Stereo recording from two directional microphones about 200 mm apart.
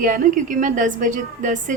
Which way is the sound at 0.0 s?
40° right (ahead or behind).